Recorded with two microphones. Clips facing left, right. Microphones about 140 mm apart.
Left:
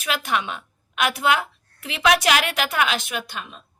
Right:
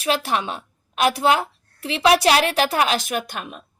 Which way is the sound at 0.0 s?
35° right (ahead or behind).